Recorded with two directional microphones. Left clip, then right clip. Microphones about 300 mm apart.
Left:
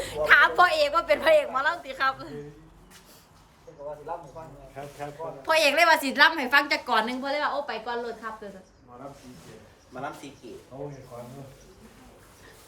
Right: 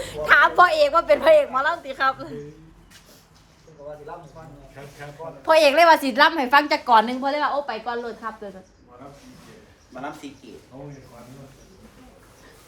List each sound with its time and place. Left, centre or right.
0.0 s a woman's voice: centre
5.4 s a woman's voice: centre
9.9 s speech: centre